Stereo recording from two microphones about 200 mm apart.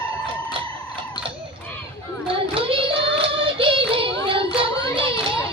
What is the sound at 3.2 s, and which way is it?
Child singing, 25° right (ahead or behind).